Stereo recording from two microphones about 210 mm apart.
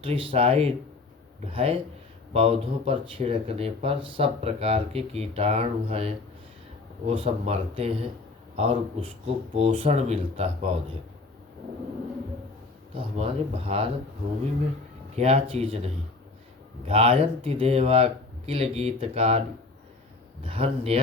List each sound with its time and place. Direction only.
0.0 s speech: 25° right (ahead or behind)
13.0 s speech: 30° right (ahead or behind)
15.1 s speech: 30° right (ahead or behind)
20.4 s speech: 25° right (ahead or behind)